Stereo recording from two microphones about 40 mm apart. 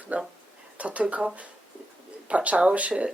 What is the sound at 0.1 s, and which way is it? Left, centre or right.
Speech, right.